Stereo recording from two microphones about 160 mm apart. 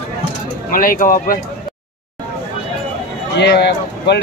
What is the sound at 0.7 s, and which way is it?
Speech, 60° left (ahead or behind).